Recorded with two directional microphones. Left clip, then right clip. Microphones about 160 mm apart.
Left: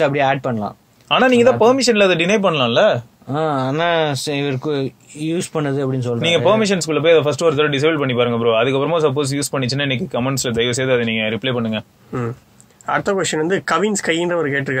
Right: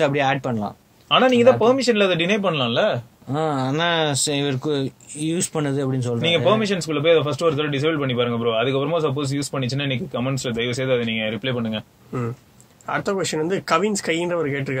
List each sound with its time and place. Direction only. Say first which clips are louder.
0.0 s speech: left 4 dB; 20° right (ahead or behind)
1.0 s speech: left 2 dB; 45° left (ahead or behind)
3.3 s speech: left 4 dB; 20° right (ahead or behind)
6.2 s a man's voice: left 4 dB; 45° left (ahead or behind)
12.8 s speech: left 5 dB; 10° left (ahead or behind)